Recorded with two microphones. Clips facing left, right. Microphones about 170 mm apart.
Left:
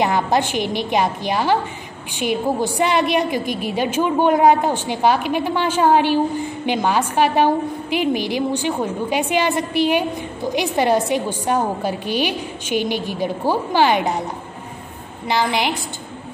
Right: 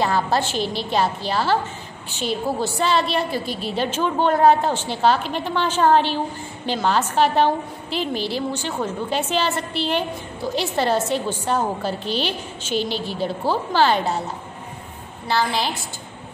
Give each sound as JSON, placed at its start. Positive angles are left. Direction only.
{"t": 0.0, "sound": "a woman's voice", "side_deg": 15}